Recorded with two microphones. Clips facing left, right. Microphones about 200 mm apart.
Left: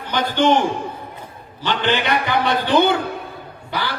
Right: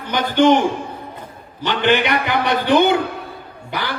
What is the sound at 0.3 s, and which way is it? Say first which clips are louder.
Speech: right 3 dB; 15° right (ahead or behind).